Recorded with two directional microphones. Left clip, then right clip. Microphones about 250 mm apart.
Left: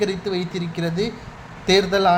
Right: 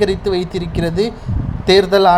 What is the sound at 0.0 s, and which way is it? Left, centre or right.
Speech, centre.